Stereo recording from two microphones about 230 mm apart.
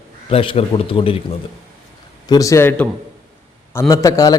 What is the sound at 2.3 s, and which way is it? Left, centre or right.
A man's voice, centre.